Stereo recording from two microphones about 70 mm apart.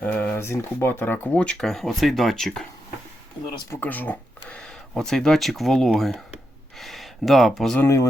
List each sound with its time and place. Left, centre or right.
0.0 s a sound: left
0.3 s speech: left
1.4 s speech: centre
1.6 s speech: centre
3.8 s speech: left; by 7.8 s centre